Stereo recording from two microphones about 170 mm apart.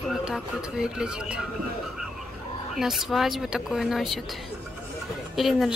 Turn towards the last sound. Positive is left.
turn(degrees=0)  # may be behind; listen again after turning